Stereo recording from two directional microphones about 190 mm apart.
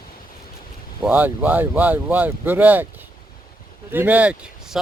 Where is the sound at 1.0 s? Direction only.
10° right (ahead or behind).